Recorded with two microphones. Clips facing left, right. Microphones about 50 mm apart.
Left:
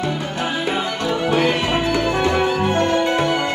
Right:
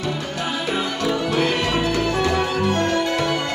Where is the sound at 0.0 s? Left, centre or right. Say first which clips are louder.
Left 3 dB; left.